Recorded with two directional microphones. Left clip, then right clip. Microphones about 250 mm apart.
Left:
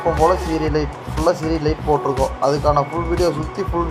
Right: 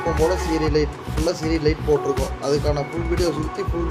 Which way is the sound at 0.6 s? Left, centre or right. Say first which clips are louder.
Even; centre.